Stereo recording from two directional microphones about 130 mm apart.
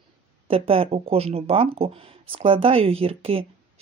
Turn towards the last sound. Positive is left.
turn(degrees=-45)  # may be behind; listen again after turning